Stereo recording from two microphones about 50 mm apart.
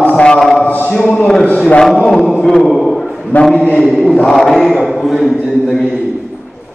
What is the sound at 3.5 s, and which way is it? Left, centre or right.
Speech, left.